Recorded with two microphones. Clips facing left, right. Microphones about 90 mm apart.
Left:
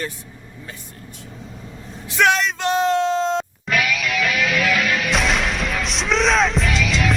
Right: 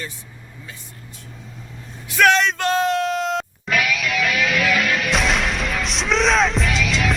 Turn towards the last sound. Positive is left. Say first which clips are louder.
# left 1 dB
turn(degrees=0)  # may be behind; listen again after turning